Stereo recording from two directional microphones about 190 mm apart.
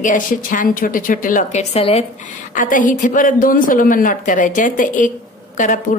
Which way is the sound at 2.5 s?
45° left (ahead or behind).